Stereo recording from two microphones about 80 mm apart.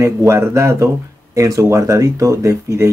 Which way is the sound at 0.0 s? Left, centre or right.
Right.